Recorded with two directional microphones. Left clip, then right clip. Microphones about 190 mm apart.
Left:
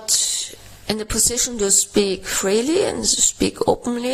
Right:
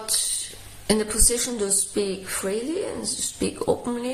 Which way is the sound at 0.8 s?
50° left (ahead or behind).